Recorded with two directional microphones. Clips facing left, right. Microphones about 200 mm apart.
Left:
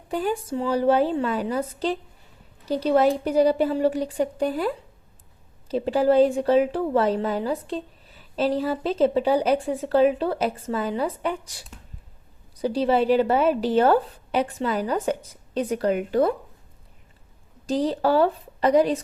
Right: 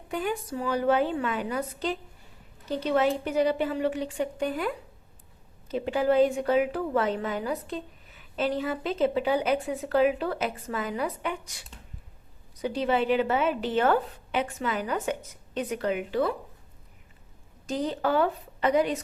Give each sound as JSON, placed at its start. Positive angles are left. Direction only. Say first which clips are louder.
{"t": 0.1, "sound": "a woman's voice", "louder": "left 5 dB", "side_deg": 35}
{"t": 17.7, "sound": "a woman's voice", "louder": "left 5 dB", "side_deg": 35}